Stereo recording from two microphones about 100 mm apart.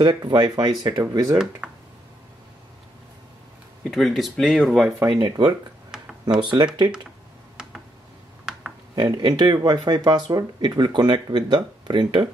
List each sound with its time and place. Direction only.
0.0 s speech: 45° right (ahead or behind)
1.6 s a sound: 10° right (ahead or behind)
3.8 s speech: centre (ahead or behind)
5.1 s speech: 50° right (ahead or behind)
6.5 s speech: 45° right (ahead or behind)
8.9 s speech: 50° right (ahead or behind)